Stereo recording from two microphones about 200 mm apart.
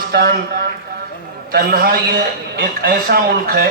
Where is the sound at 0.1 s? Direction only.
50° right (ahead or behind).